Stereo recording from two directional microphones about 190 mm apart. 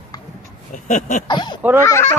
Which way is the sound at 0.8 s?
40° left (ahead or behind).